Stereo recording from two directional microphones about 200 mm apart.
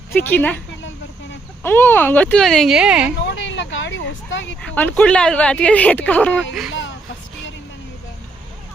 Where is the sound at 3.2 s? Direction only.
65° left (ahead or behind).